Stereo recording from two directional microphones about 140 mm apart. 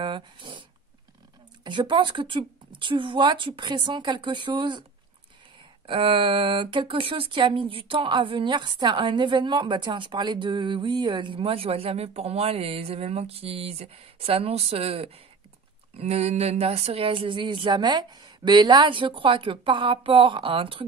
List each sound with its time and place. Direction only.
0.0 s a sound: 35° right (ahead or behind)
1.6 s speech: 35° right (ahead or behind)
5.9 s speech: 40° right (ahead or behind)